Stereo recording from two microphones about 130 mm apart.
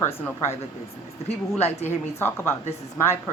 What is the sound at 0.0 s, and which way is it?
Speech, 20° left (ahead or behind).